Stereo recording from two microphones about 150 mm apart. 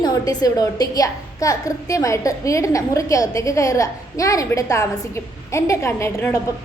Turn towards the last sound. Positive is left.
turn(degrees=20)  # may be behind; listen again after turning